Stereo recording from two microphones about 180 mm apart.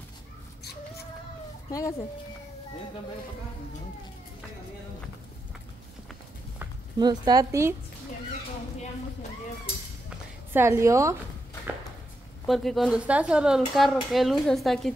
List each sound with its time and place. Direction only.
1.7 s speech: 15° left (ahead or behind)
7.0 s speech: 25° right (ahead or behind)
10.0 s walk: 10° right (ahead or behind)
12.4 s speech: centre (ahead or behind)